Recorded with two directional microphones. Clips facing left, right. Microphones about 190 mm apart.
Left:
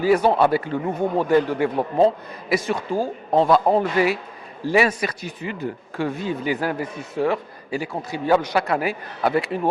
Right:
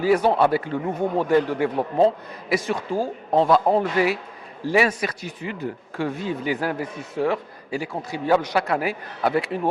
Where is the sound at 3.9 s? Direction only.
10° left (ahead or behind).